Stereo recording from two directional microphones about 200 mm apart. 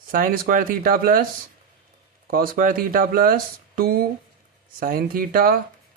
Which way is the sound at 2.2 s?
45° right (ahead or behind).